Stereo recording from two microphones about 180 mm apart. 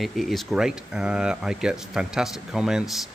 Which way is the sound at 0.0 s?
Centre (ahead or behind).